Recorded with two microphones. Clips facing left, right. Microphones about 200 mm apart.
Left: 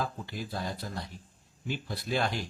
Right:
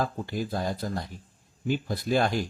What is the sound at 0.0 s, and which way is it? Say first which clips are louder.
Speech: right 6 dB; 45° right (ahead or behind).